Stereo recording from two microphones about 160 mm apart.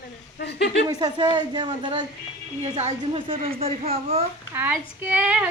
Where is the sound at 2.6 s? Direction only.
40° right (ahead or behind).